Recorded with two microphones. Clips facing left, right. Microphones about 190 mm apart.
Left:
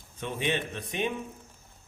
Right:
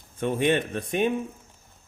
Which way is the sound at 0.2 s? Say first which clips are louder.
Right 8 dB; 50° right (ahead or behind).